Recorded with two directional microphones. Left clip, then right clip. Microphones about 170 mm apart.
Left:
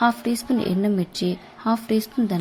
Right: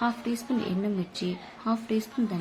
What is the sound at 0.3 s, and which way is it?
Speech, 40° left (ahead or behind).